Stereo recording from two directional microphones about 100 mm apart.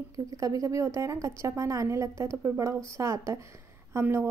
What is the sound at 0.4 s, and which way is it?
Speech, 35° right (ahead or behind).